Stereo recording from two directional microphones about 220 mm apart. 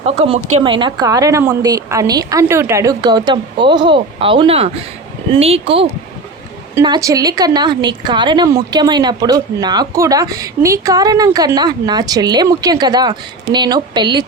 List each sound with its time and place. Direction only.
0.0 s a woman's voice: 25° right (ahead or behind)